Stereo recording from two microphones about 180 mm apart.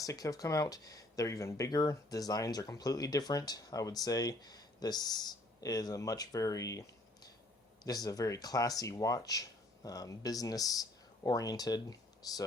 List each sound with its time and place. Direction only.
0.0 s speech: 20° left (ahead or behind)
7.9 s speech: 20° left (ahead or behind)